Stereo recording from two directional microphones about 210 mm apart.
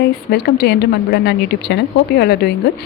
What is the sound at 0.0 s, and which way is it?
A woman's voice, 50° left (ahead or behind).